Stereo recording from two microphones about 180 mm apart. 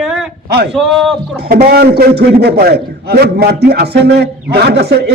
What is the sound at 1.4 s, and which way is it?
A man's voice, 60° right (ahead or behind).